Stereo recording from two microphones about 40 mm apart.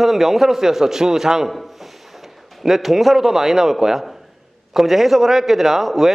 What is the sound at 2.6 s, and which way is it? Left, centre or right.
A man's voice, centre.